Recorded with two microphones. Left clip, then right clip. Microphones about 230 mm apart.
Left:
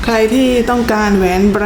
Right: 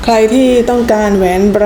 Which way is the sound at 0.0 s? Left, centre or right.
Centre.